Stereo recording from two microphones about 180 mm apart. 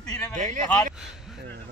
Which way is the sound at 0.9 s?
Centre (ahead or behind).